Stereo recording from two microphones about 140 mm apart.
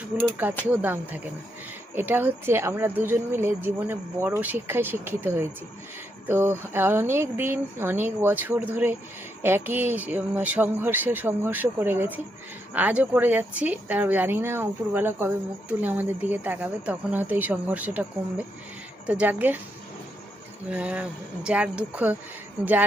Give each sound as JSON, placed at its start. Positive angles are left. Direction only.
{"t": 0.7, "sound": "speech", "side_deg": -15}
{"t": 20.7, "sound": "speech", "side_deg": -10}